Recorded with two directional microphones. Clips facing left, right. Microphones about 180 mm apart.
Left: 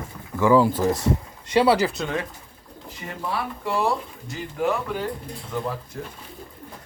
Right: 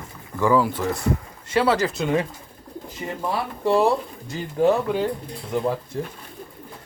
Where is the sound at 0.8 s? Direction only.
35° left (ahead or behind).